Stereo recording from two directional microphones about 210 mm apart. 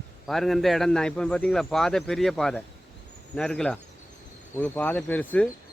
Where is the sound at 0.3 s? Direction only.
Centre (ahead or behind).